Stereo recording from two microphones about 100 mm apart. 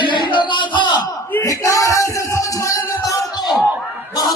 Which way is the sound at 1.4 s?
35° left (ahead or behind).